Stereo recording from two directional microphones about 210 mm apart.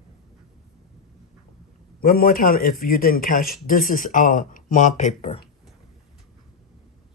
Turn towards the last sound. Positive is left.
turn(degrees=30)  # may be behind; listen again after turning